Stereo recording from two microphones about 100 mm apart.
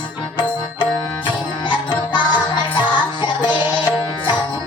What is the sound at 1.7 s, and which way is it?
Music, 50° left (ahead or behind).